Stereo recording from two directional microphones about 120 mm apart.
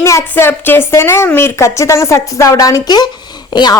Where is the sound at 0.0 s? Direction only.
25° left (ahead or behind).